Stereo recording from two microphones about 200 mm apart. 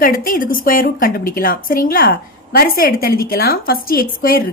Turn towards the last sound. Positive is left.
turn(degrees=45)  # may be behind; listen again after turning